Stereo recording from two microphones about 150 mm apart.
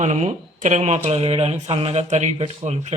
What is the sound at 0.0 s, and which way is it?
Speech, 50° right (ahead or behind).